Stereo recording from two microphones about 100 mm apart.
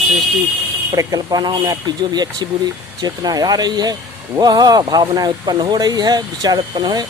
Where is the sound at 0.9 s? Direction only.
40° right (ahead or behind).